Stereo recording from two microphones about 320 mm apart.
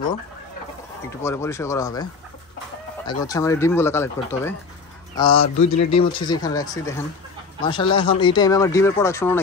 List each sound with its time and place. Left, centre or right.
1.2 s speech: centre
3.1 s speech: centre
5.3 s speech: left
6.1 s speech: centre